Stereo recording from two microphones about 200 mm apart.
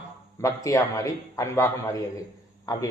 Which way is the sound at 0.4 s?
15° left (ahead or behind).